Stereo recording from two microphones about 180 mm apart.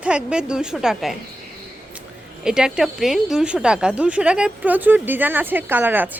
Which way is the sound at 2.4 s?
5° right (ahead or behind).